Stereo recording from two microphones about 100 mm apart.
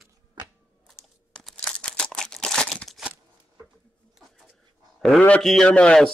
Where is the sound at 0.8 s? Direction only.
5° left (ahead or behind).